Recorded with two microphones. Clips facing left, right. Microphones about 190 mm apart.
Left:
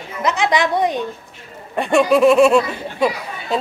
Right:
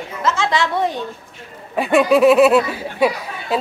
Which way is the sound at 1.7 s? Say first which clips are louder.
Even; 5° right (ahead or behind).